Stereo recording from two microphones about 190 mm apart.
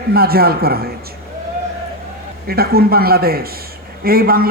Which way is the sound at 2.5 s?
55° right (ahead or behind).